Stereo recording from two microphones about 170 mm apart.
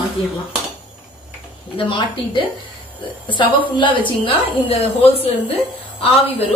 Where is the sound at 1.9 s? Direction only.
30° left (ahead or behind).